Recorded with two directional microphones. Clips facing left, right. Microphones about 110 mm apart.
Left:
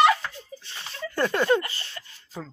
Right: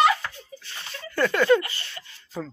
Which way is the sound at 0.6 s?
30° left (ahead or behind).